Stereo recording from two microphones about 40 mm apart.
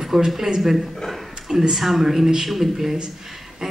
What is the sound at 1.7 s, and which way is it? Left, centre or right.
Speech, centre.